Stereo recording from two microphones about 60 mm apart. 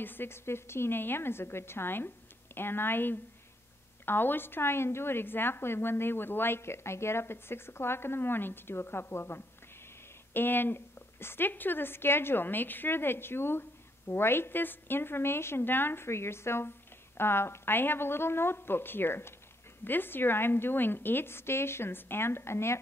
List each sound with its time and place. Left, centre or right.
0.0 s a woman's voice: left